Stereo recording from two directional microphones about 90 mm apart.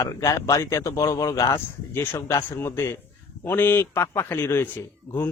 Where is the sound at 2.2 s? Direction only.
40° left (ahead or behind).